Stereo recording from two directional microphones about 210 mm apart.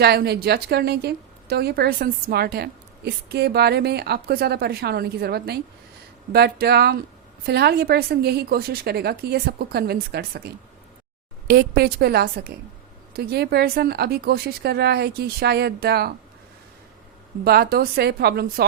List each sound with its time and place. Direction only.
0.0 s a woman's voice: 50° right (ahead or behind)
17.4 s a woman's voice: 45° right (ahead or behind)